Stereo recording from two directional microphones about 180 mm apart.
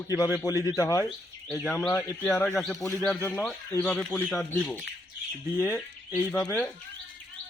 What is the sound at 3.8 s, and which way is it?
Speech, 5° left (ahead or behind).